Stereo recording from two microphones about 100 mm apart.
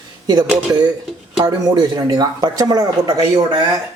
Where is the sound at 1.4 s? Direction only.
40° right (ahead or behind).